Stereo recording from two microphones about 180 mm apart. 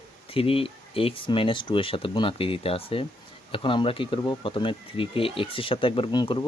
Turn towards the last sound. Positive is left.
turn(degrees=25)  # may be behind; listen again after turning